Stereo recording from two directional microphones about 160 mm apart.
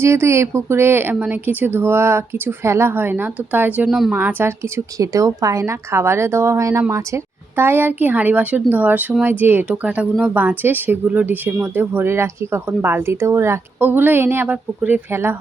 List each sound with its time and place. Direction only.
0.0 s speech: 15° right (ahead or behind)